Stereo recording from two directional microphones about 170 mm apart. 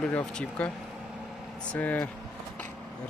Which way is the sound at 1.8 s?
10° left (ahead or behind).